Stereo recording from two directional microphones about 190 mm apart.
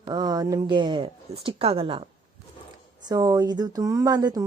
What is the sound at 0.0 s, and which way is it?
Speech, 20° right (ahead or behind).